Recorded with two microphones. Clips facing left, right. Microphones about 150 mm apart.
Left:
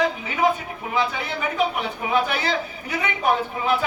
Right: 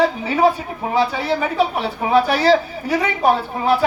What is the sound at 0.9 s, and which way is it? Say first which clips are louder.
A man's voice: right 6 dB; 35° right (ahead or behind).